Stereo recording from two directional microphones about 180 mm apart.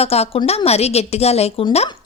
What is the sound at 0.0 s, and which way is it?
A woman's voice, 35° left (ahead or behind).